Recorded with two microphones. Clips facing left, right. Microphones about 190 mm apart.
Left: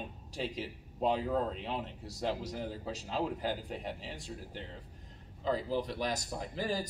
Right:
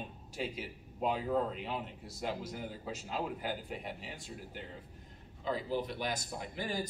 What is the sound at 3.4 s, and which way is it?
Speech, 10° right (ahead or behind).